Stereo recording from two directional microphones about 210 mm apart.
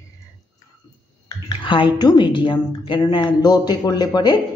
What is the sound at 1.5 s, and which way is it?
A woman's voice, 25° left (ahead or behind).